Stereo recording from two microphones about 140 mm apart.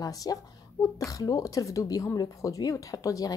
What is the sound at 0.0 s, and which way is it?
A woman's voice, 25° left (ahead or behind).